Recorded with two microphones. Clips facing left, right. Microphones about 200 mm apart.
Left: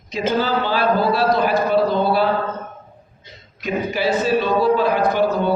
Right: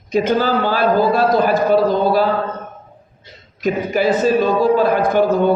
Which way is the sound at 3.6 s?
45° right (ahead or behind).